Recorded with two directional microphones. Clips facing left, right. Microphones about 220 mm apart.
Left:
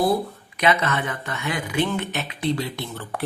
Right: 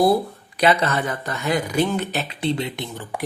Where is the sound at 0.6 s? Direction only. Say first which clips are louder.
Right 3 dB; 35° right (ahead or behind).